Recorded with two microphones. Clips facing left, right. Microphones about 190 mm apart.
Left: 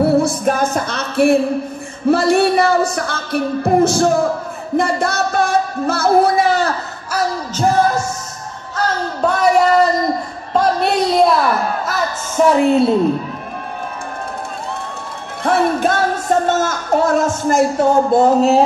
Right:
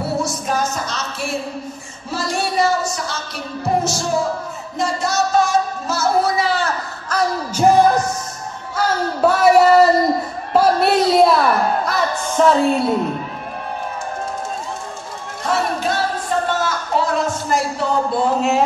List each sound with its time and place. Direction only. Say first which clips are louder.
0.0 s music: left 9 dB; 55° left (ahead or behind)
2.0 s speech: left 10 dB; 60° left (ahead or behind)
4.7 s music: left 3 dB; 60° left (ahead or behind)
7.6 s music: right 2 dB; 10° right (ahead or behind)
8.7 s a sound: even; 10° right (ahead or behind)
11.8 s music: right 1 dB; 5° left (ahead or behind)
12.4 s a woman's voice: left 3 dB; 15° left (ahead or behind)
15.4 s music: left 5 dB; 55° left (ahead or behind)